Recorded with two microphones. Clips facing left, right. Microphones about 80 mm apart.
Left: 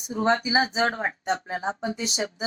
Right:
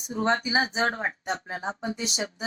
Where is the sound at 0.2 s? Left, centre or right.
Left.